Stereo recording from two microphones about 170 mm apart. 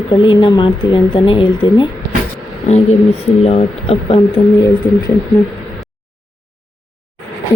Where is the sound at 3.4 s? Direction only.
35° left (ahead or behind).